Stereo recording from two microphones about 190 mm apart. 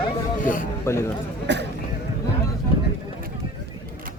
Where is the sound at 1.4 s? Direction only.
65° right (ahead or behind).